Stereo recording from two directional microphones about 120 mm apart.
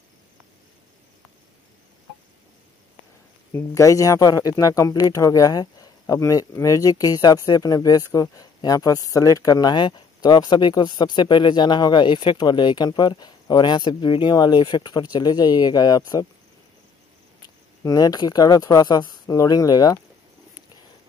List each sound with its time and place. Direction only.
3.5 s speech: 25° left (ahead or behind)
17.8 s speech: 30° left (ahead or behind)